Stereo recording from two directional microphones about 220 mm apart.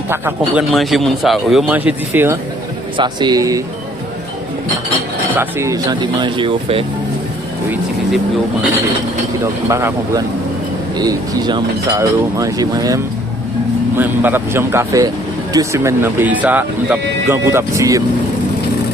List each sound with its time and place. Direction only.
0.1 s speech: 10° right (ahead or behind)
0.7 s speech: centre (ahead or behind); by 3.6 s 15° right (ahead or behind)
5.3 s speech: 10° right (ahead or behind)
9.6 s speech: 15° right (ahead or behind)